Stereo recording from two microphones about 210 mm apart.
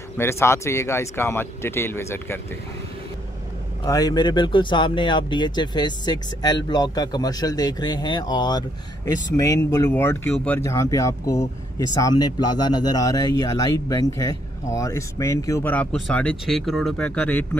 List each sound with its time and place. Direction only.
0.2 s speech: 10° left (ahead or behind)
3.8 s speech: 20° left (ahead or behind)